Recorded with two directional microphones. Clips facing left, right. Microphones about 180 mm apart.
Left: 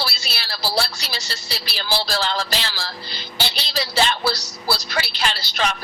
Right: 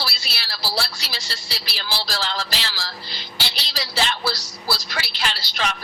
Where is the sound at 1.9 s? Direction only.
50° left (ahead or behind).